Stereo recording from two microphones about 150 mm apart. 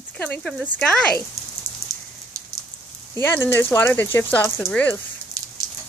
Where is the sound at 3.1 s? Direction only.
15° left (ahead or behind).